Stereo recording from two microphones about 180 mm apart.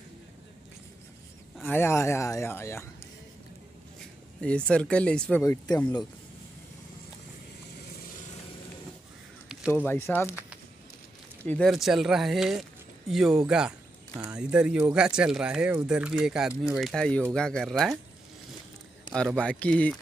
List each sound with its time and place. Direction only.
1.7 s speech: 15° left (ahead or behind)
4.4 s speech: 5° left (ahead or behind)
5.4 s speech: 15° left (ahead or behind)
9.8 s speech: 10° left (ahead or behind)
11.4 s speech: 5° left (ahead or behind)
19.1 s speech: 5° left (ahead or behind)